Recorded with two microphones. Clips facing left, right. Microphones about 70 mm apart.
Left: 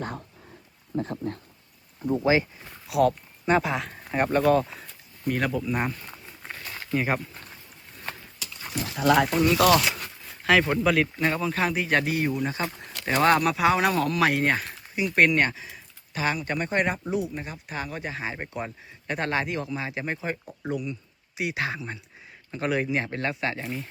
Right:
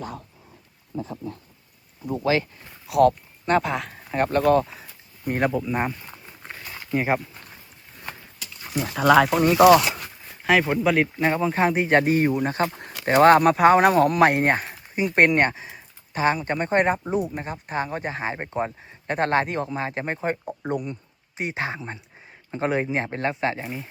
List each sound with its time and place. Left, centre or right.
2.4 s speech: centre
5.5 s a sound: centre
7.2 s speech: centre
8.8 s speech: right
9.6 s a sound: centre
10.5 s speech: centre; by 12.3 s right
12.3 s speech: right; by 23.9 s centre